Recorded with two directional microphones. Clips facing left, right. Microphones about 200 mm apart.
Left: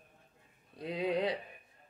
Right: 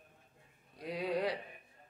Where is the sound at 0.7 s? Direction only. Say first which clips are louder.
Left 3 dB; 25° left (ahead or behind).